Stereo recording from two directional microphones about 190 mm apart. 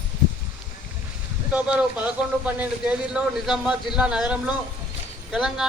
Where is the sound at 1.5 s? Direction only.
5° right (ahead or behind).